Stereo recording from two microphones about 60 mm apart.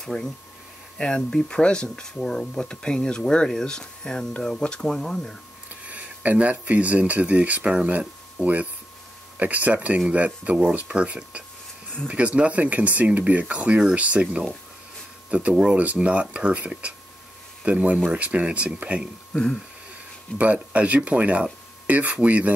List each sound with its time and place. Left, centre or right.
0.0 s speech: centre
5.9 s speech: right
15.5 s speech: centre
19.3 s speech: centre
20.3 s speech: right